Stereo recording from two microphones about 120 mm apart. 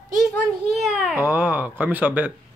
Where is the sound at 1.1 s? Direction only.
15° right (ahead or behind).